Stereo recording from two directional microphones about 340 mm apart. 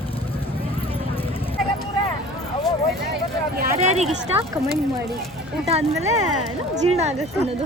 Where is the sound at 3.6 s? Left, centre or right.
Centre.